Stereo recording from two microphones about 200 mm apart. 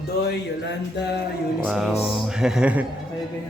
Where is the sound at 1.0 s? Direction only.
55° left (ahead or behind).